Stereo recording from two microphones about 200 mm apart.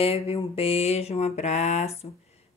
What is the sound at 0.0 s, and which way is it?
Mantra, 30° left (ahead or behind).